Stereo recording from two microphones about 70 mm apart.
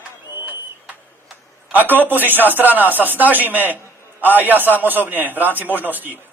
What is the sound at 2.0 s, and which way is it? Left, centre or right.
A man's voice, right.